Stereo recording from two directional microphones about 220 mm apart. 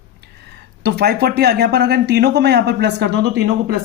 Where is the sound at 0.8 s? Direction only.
50° right (ahead or behind).